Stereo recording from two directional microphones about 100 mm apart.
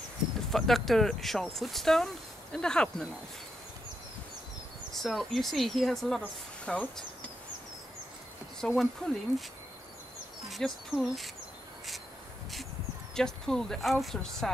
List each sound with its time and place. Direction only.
0.5 s speech: 5° left (ahead or behind)
4.9 s speech: centre (ahead or behind)
8.5 s speech: 5° left (ahead or behind)
10.5 s speech: centre (ahead or behind)
13.1 s speech: 5° left (ahead or behind)